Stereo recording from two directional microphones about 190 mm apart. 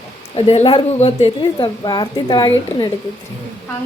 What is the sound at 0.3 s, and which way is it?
A woman's voice, 30° left (ahead or behind).